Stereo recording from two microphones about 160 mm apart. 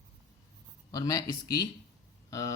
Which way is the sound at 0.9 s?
25° left (ahead or behind).